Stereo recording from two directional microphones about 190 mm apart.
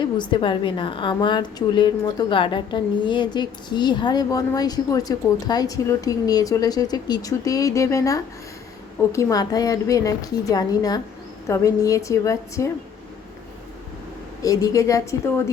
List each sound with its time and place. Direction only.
0.0 s a woman's voice: 25° left (ahead or behind)
14.4 s a woman's voice: 20° left (ahead or behind)